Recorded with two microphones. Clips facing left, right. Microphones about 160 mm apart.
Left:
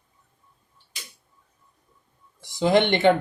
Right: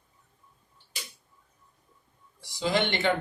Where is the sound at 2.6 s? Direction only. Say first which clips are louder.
Left 8 dB; 50° left (ahead or behind).